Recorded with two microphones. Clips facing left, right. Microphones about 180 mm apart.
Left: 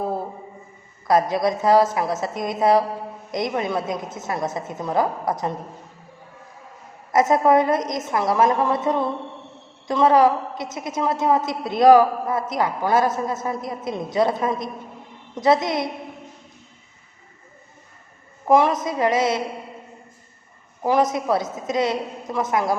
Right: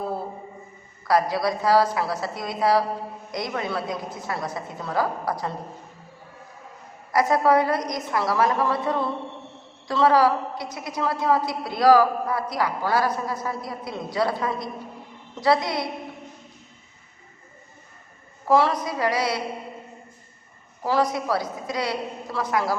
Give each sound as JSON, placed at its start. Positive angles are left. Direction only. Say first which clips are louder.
{"t": 1.0, "sound": "a woman's voice", "louder": "left 3 dB", "side_deg": 20}
{"t": 7.1, "sound": "a woman's voice", "louder": "left 3 dB", "side_deg": 20}
{"t": 18.4, "sound": "a woman's voice", "louder": "left 3 dB", "side_deg": 20}
{"t": 20.8, "sound": "a woman's voice", "louder": "left 3 dB", "side_deg": 20}